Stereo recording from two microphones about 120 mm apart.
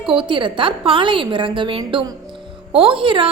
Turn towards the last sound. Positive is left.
turn(degrees=-45)  # may be behind; listen again after turning